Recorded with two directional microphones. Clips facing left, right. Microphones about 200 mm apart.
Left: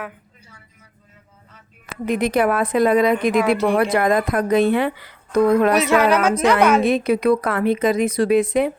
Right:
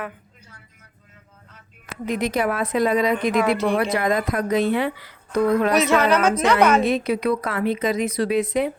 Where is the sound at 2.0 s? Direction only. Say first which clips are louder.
Left 4 dB; 55° left (ahead or behind).